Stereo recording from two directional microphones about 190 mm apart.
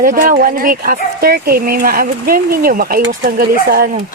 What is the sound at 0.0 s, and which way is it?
Speech, 45° right (ahead or behind).